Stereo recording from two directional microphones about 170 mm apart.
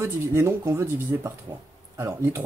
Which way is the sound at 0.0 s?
15° right (ahead or behind).